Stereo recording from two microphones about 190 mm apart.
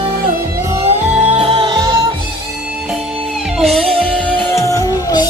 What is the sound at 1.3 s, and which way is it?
Music, 30° right (ahead or behind).